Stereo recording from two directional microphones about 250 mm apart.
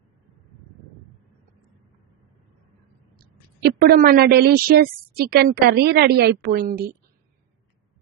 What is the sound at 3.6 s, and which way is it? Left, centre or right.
A woman's voice, right.